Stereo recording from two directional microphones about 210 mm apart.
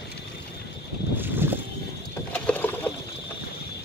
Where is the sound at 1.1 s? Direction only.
10° right (ahead or behind).